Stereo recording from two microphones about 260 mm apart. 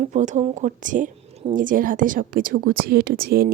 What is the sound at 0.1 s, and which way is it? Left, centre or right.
Speech, right.